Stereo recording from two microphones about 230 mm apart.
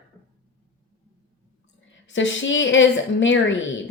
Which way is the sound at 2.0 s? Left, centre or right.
Left.